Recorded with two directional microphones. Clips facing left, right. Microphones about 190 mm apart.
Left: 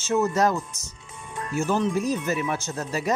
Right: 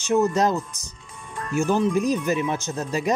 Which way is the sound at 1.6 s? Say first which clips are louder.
Right 3 dB; 15° right (ahead or behind).